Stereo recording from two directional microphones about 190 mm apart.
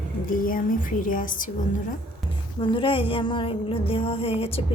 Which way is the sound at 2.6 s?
25° left (ahead or behind).